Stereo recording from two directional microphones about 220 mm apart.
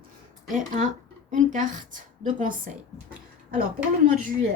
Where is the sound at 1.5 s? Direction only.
35° right (ahead or behind).